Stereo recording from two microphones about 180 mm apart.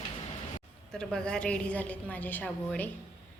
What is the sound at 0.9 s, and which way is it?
A woman's voice, 5° left (ahead or behind).